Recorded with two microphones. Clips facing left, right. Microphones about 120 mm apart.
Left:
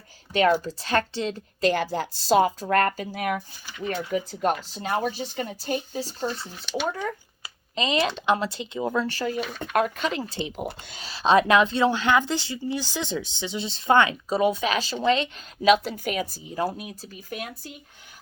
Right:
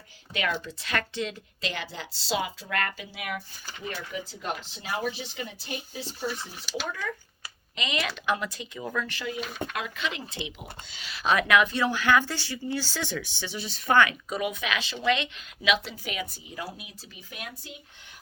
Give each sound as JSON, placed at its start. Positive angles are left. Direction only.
{"t": 0.3, "sound": "speech", "side_deg": 35}
{"t": 1.6, "sound": "a woman's voice", "side_deg": 45}
{"t": 6.4, "sound": "speech", "side_deg": 0}
{"t": 7.8, "sound": "speech", "side_deg": 30}
{"t": 9.4, "sound": "speech", "side_deg": 0}
{"t": 9.7, "sound": "speech", "side_deg": 45}
{"t": 10.6, "sound": "a woman's voice", "side_deg": 50}
{"t": 11.0, "sound": "speech", "side_deg": 30}